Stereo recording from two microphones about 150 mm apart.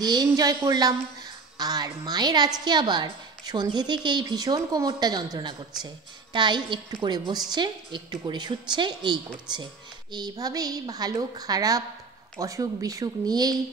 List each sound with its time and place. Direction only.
0.0 s a woman's voice: 25° right (ahead or behind)
5.7 s speech: centre (ahead or behind)
6.3 s a woman's voice: 30° right (ahead or behind)